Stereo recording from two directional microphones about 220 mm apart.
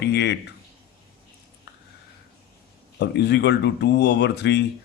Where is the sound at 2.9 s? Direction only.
50° left (ahead or behind).